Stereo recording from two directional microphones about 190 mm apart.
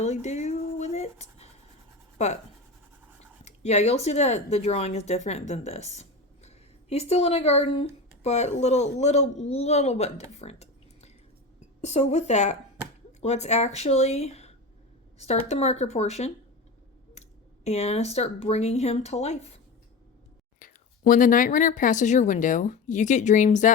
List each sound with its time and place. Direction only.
0.0 s a sound: 35° left (ahead or behind)
2.1 s a woman's voice: 35° left (ahead or behind)
20.6 s a woman's voice: 45° left (ahead or behind)